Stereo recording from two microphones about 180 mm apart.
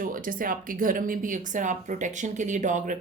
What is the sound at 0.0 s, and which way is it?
A woman's voice, 50° right (ahead or behind).